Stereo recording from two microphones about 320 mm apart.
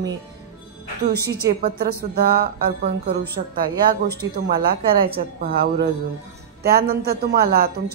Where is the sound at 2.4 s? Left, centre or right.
Right.